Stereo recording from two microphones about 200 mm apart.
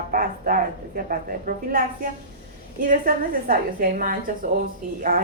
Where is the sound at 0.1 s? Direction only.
45° right (ahead or behind).